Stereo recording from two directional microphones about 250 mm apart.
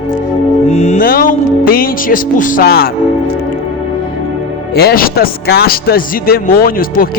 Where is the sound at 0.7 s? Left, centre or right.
Left.